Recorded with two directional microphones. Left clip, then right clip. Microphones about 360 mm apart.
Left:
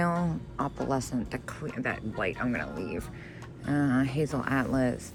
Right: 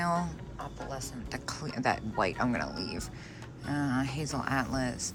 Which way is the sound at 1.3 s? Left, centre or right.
Centre.